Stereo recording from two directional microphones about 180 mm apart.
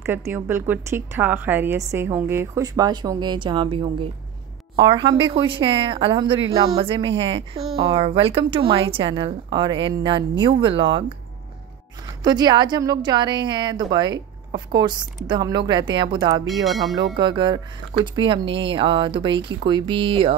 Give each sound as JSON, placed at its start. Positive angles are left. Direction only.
{"t": 0.0, "sound": "a woman's voice", "side_deg": -10}
{"t": 12.2, "sound": "a woman's voice", "side_deg": -25}
{"t": 16.4, "sound": "speech", "side_deg": 0}
{"t": 16.9, "sound": "a woman's voice", "side_deg": -25}